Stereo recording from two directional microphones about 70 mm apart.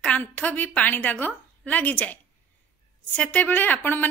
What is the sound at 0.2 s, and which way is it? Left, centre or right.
A woman's voice, left.